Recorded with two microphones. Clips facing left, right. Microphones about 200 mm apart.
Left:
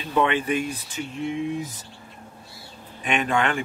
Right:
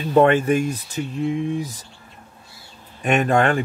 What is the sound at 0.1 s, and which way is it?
Speech, 45° right (ahead or behind).